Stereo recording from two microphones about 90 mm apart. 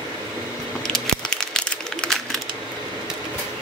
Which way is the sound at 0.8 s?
5° left (ahead or behind).